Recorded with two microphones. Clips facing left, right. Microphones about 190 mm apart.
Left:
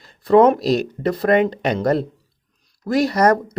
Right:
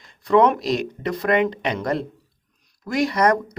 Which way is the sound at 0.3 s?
35° left (ahead or behind).